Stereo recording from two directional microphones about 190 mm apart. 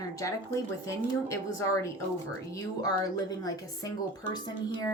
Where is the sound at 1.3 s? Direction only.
15° left (ahead or behind).